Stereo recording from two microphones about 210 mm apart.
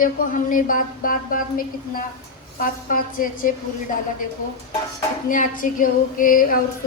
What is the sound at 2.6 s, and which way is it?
Speech, 40° left (ahead or behind).